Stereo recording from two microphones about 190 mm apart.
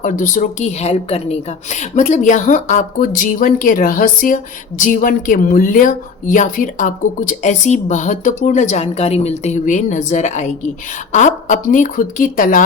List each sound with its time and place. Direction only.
0.0 s a woman's voice: 45° left (ahead or behind)